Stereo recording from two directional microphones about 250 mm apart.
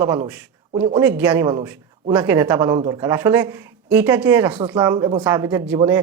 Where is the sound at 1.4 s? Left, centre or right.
Centre.